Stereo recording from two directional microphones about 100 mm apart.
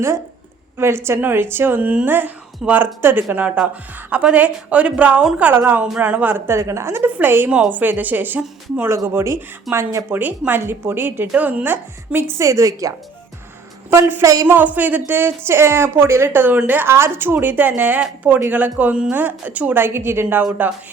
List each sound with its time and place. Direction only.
0.8 s a woman's voice: 25° right (ahead or behind)
13.9 s a woman's voice: 25° right (ahead or behind)
14.4 s a woman's voice: 15° right (ahead or behind)